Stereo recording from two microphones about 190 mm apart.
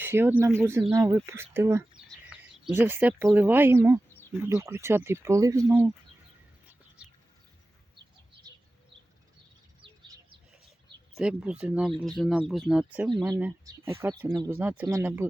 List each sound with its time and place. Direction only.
0.0 s speech: 10° right (ahead or behind)
2.3 s bird: centre (ahead or behind)
2.8 s speech: 10° right (ahead or behind)
9.8 s bird: 25° right (ahead or behind)
11.1 s speech: 5° right (ahead or behind)
13.3 s speech: 15° right (ahead or behind)